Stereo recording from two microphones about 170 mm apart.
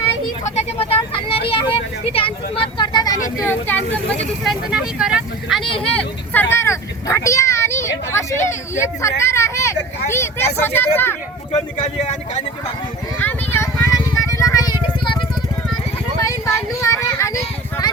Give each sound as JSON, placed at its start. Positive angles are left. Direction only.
{"t": 0.4, "sound": "speech", "side_deg": 35}
{"t": 4.4, "sound": "speech", "side_deg": -5}
{"t": 11.8, "sound": "speech", "side_deg": 40}
{"t": 13.1, "sound": "vehicle", "side_deg": 10}
{"t": 14.3, "sound": "music", "side_deg": 20}
{"t": 16.2, "sound": "vehicle", "side_deg": 15}